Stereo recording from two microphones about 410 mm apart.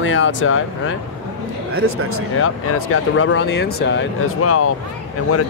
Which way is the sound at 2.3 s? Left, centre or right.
Left.